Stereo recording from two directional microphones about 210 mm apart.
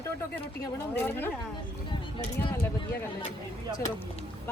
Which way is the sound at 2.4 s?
10° left (ahead or behind).